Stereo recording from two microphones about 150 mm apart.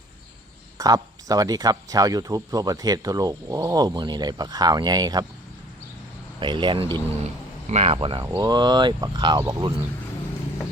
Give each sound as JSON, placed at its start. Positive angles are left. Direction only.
{"t": 0.8, "sound": "speech", "side_deg": -25}
{"t": 6.4, "sound": "speech", "side_deg": -30}
{"t": 7.7, "sound": "speech", "side_deg": -45}
{"t": 7.9, "sound": "speech", "side_deg": -35}
{"t": 8.2, "sound": "speech", "side_deg": -25}